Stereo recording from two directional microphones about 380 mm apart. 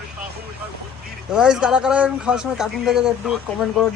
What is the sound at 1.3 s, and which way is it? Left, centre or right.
Speech, centre.